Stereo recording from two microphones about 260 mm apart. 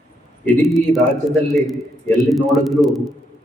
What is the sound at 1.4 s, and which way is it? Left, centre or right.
A man's voice, centre.